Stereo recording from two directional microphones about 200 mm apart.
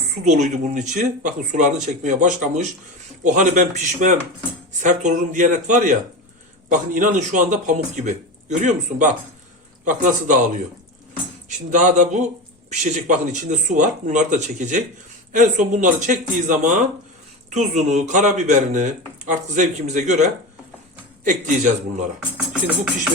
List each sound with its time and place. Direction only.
0.3 s speech: 35° right (ahead or behind)